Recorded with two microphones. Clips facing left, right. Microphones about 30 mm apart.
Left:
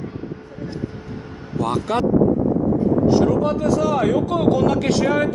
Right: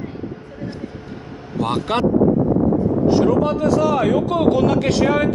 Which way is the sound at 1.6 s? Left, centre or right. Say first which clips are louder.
Right 1 dB; right.